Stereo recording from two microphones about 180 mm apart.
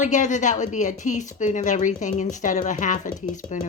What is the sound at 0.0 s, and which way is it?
Speech, 45° left (ahead or behind).